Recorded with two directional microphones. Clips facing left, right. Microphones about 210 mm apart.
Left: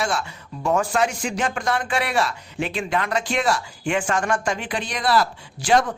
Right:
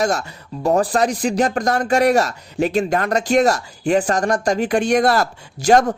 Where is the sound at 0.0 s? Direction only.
40° right (ahead or behind).